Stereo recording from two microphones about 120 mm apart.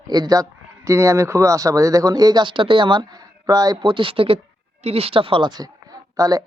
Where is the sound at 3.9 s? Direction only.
45° right (ahead or behind); by 6.5 s 30° right (ahead or behind).